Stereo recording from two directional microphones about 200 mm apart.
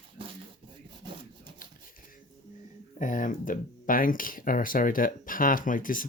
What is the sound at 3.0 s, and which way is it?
Speech, 40° left (ahead or behind).